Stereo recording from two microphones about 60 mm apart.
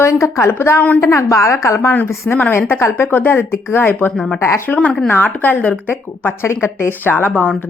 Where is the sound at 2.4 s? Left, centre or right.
Left.